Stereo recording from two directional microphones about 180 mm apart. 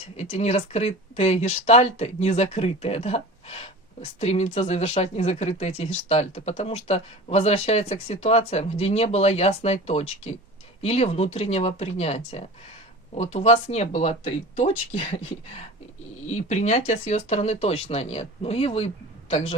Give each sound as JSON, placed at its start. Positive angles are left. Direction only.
{"t": 0.2, "sound": "speech", "side_deg": 35}
{"t": 16.3, "sound": "speech", "side_deg": 40}